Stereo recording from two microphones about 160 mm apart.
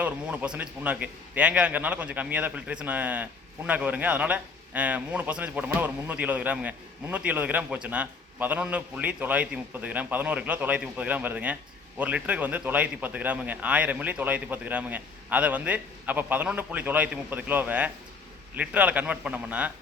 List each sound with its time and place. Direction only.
0.0 s a man's voice: 5° right (ahead or behind)